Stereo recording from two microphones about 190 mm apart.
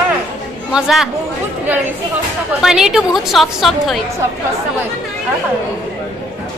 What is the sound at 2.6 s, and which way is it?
A woman's voice, centre (ahead or behind).